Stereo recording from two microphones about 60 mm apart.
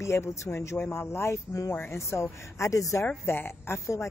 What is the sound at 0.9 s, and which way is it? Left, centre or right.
A woman's voice, left.